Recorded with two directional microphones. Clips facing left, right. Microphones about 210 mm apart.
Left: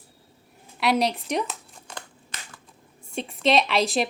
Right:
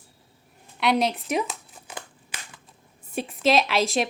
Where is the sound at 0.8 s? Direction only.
Centre (ahead or behind).